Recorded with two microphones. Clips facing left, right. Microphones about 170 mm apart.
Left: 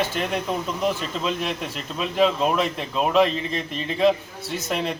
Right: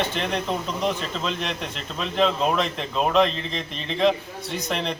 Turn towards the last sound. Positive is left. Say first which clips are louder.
# left 1 dB
turn(degrees=5)  # may be behind; listen again after turning